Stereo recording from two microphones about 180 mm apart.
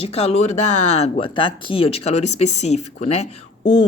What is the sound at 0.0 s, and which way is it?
Speech, 35° left (ahead or behind).